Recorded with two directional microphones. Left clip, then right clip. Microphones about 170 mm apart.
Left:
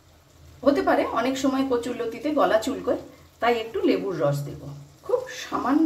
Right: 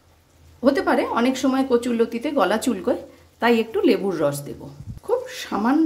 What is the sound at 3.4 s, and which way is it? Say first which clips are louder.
Speech: right 4 dB; 75° right (ahead or behind).